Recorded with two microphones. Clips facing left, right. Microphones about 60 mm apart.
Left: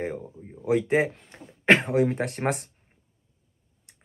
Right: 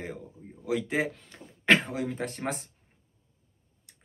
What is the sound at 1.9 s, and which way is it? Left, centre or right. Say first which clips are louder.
Speech: left 9 dB; left.